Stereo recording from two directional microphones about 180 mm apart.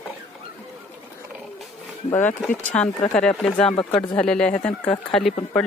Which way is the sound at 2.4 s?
10° left (ahead or behind).